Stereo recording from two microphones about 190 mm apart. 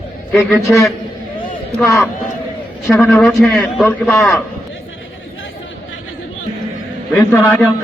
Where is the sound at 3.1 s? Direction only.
Centre (ahead or behind).